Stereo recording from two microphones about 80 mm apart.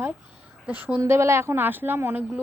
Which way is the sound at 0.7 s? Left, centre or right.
Right.